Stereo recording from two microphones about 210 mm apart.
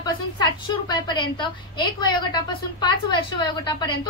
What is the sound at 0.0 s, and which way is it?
A woman's voice, 20° left (ahead or behind).